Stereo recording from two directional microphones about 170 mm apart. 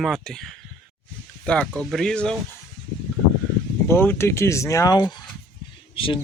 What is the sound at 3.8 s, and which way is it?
Speech, 15° left (ahead or behind).